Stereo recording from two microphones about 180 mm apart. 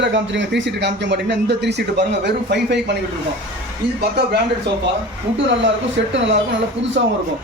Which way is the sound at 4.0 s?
65° right (ahead or behind).